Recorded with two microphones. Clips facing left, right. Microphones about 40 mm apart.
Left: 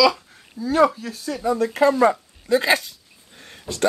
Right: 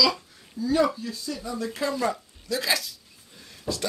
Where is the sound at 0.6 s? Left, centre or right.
Left.